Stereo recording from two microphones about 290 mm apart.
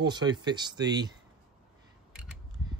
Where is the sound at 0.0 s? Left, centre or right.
Centre.